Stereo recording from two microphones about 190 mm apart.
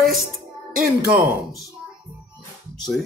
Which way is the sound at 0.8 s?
50° right (ahead or behind).